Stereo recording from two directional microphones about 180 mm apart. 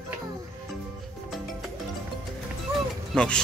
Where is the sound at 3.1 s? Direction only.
5° left (ahead or behind).